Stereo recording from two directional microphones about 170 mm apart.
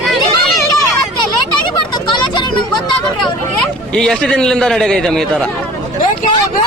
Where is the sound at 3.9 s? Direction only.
5° left (ahead or behind).